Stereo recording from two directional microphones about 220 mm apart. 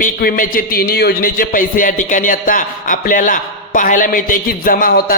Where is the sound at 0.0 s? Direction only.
40° left (ahead or behind).